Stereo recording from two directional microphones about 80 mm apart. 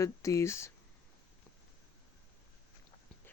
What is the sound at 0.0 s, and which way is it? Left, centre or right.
Speech, left.